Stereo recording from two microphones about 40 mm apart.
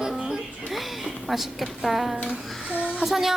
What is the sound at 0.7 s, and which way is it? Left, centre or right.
Speech, centre.